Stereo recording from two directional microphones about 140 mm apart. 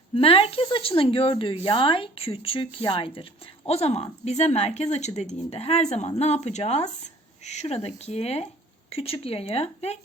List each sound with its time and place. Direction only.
0.2 s speech: 40° left (ahead or behind)
3.7 s speech: 50° left (ahead or behind)